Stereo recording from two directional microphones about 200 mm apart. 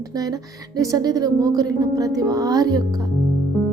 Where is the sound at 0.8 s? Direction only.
20° right (ahead or behind).